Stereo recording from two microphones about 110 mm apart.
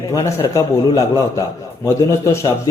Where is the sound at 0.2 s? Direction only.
40° left (ahead or behind).